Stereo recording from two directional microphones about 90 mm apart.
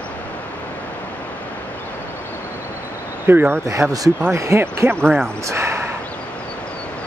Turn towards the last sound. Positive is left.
turn(degrees=-30)  # may be behind; listen again after turning